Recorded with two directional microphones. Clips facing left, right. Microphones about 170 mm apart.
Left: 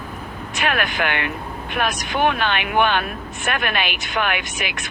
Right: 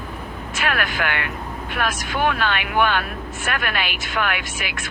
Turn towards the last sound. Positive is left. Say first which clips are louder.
# left 2 dB
turn(degrees=20)  # may be behind; listen again after turning